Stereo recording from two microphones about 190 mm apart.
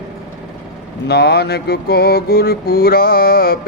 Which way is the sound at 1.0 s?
60° left (ahead or behind).